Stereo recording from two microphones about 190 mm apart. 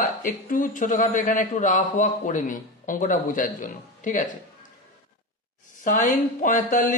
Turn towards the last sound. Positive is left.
turn(degrees=45)  # may be behind; listen again after turning